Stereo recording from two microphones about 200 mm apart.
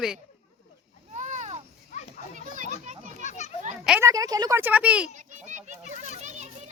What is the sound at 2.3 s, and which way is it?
Children playing, 40° right (ahead or behind).